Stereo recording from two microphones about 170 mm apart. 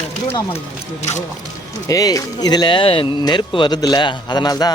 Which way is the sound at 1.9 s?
20° left (ahead or behind).